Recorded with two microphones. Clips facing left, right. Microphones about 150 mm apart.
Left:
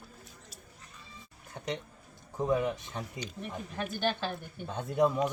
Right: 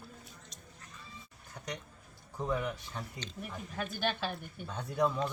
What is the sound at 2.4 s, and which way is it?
Speech, 20° left (ahead or behind).